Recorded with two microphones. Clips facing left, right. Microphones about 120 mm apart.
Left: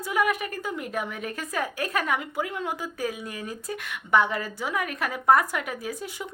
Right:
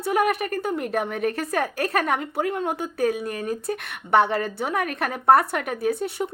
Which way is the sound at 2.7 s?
60° right (ahead or behind).